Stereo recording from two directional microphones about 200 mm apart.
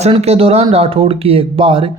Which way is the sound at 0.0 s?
30° right (ahead or behind).